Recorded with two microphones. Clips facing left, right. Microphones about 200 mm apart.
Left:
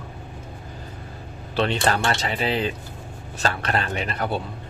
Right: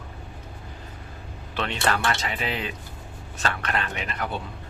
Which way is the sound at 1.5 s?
30° left (ahead or behind).